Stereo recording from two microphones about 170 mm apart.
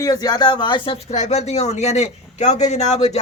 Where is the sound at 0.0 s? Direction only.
20° left (ahead or behind).